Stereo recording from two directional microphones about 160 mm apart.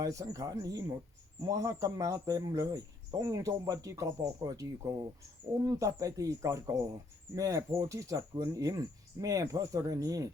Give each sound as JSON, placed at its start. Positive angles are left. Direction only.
{"t": 0.0, "sound": "speech", "side_deg": -20}